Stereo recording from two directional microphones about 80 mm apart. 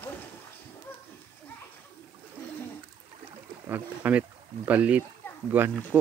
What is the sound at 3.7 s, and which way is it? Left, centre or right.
Speech, right.